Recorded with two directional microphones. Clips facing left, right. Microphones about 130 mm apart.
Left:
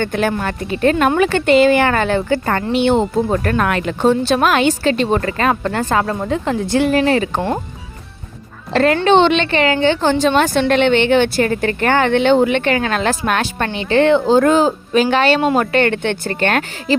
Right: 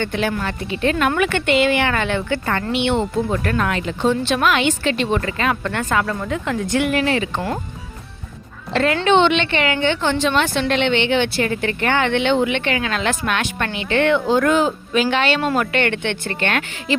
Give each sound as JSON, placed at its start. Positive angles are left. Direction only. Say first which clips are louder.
{"t": 0.0, "sound": "a woman's voice", "louder": "left 4 dB", "side_deg": 45}
{"t": 3.6, "sound": "a woman's voice", "louder": "left 4 dB", "side_deg": 60}
{"t": 8.7, "sound": "a woman's voice", "louder": "left 4 dB", "side_deg": 40}